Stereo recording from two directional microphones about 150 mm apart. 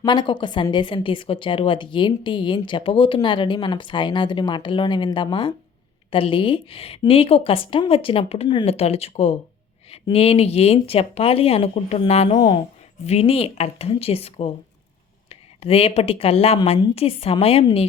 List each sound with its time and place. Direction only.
0.0 s a woman's voice: 30° left (ahead or behind)